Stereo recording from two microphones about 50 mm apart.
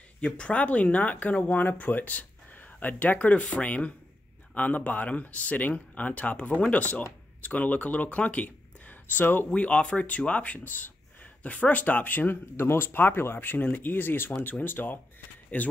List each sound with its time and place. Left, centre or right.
0.2 s speech: left
9.2 s speech: left
9.5 s speech: left
10.6 s speech: left
12.5 s speech: left